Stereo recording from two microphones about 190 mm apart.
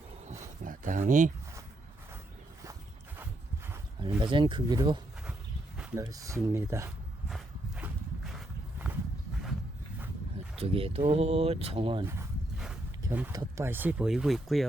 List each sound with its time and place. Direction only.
0.3 s a sound: 45° right (ahead or behind)
4.2 s speech: 25° right (ahead or behind)
5.7 s speech: 10° right (ahead or behind)
7.3 s walk: centre (ahead or behind)
10.6 s speech: 30° right (ahead or behind)
12.0 s speech: 15° right (ahead or behind)